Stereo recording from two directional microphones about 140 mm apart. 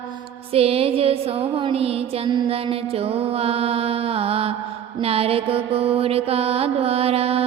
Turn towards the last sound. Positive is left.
turn(degrees=-45)  # may be behind; listen again after turning